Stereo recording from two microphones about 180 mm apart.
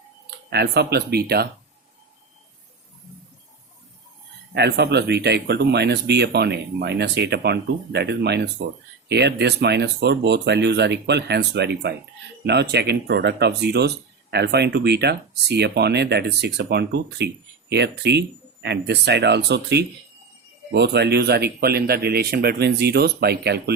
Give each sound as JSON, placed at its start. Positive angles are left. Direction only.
{"t": 0.5, "sound": "speech", "side_deg": -65}
{"t": 4.5, "sound": "speech", "side_deg": -70}